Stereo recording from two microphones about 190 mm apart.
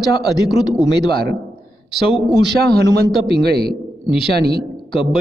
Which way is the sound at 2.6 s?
55° right (ahead or behind).